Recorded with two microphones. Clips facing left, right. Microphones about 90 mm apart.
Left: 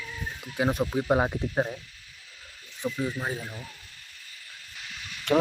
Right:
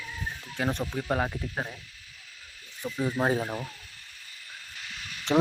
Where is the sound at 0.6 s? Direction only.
15° left (ahead or behind).